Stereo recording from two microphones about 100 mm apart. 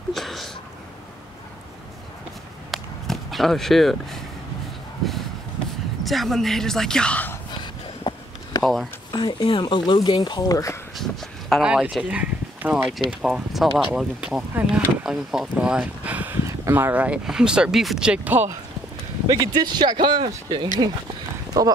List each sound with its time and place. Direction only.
0.1 s a sound: centre (ahead or behind)
2.7 s walk: centre (ahead or behind)
6.0 s speech: centre (ahead or behind)
8.1 s a sound: 45° left (ahead or behind)
9.1 s speech: 50° left (ahead or behind); by 10.8 s 35° left (ahead or behind)
11.0 s a sound: 5° left (ahead or behind)
11.6 s speech: 10° right (ahead or behind)
13.2 s speech: centre (ahead or behind)
15.1 s speech: 5° right (ahead or behind)
19.2 s speech: 45° right (ahead or behind)
21.5 s speech: 35° right (ahead or behind)